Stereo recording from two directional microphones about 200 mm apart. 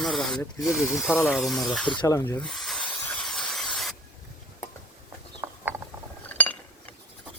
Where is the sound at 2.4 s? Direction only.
Centre (ahead or behind).